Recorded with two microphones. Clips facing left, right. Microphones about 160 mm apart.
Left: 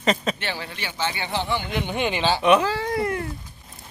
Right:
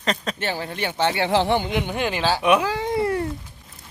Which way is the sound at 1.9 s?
Centre (ahead or behind).